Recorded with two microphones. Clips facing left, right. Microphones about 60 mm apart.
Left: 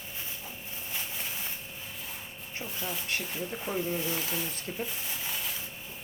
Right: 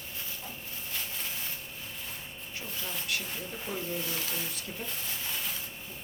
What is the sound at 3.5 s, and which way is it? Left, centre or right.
Speech, centre.